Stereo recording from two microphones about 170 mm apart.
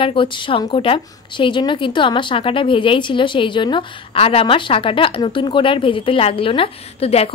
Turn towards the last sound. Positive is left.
turn(degrees=35)  # may be behind; listen again after turning